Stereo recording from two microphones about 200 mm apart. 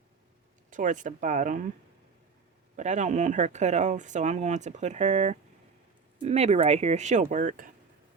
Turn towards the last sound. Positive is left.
turn(degrees=-40)  # may be behind; listen again after turning